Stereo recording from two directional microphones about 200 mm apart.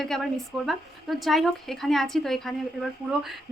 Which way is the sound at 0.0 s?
Centre (ahead or behind).